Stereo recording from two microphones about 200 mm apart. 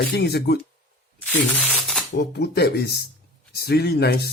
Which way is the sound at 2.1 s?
55° left (ahead or behind).